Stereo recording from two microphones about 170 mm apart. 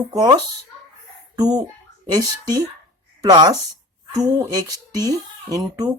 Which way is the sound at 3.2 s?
20° right (ahead or behind).